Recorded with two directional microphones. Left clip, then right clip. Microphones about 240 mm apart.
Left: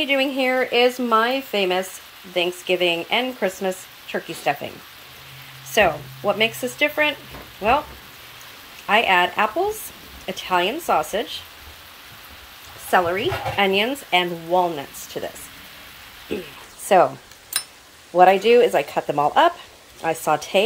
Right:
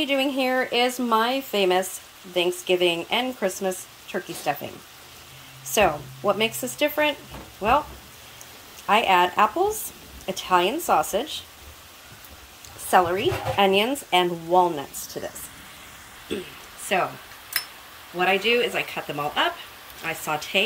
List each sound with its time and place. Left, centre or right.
0.0 s a woman's voice: centre
5.7 s a woman's voice: centre
8.8 s a woman's voice: centre
12.9 s a woman's voice: centre
15.2 s speech: centre
18.1 s speech: centre